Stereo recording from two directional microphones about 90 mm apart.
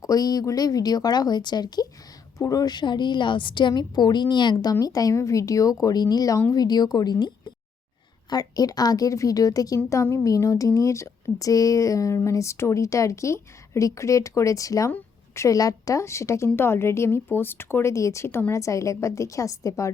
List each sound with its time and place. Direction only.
0.0 s a woman's voice: 45° left (ahead or behind)
14.8 s a sound: 25° left (ahead or behind)
15.4 s a woman's voice: 40° left (ahead or behind)